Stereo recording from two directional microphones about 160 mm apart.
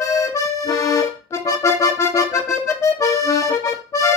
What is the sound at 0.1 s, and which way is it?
Accordion, 20° left (ahead or behind).